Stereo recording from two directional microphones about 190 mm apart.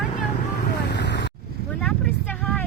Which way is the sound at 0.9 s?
65° left (ahead or behind).